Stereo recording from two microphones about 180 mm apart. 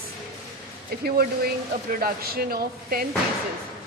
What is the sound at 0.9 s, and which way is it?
Speech, 60° right (ahead or behind).